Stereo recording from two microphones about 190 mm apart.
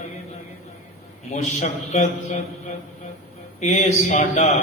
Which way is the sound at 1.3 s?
35° left (ahead or behind).